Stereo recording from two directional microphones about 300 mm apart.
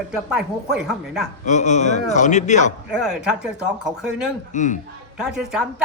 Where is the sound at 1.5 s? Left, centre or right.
Left.